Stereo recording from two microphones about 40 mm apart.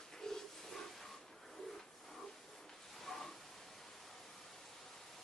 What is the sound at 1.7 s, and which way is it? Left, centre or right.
Printer, centre.